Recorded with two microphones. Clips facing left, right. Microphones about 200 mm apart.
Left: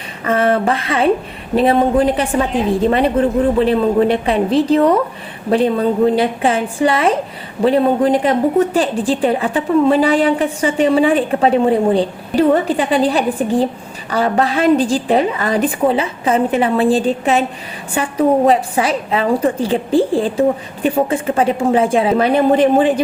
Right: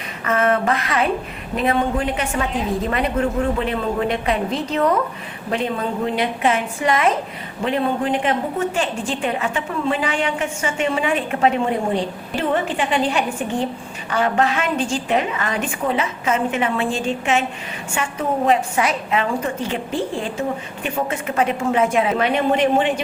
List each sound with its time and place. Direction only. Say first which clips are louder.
0.3 s a woman's voice: left 4 dB; 30° left (ahead or behind)